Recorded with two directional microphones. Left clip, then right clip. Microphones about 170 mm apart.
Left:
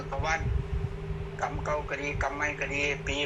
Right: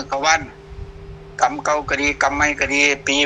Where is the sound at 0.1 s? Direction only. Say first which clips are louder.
Right 14 dB; 90° right.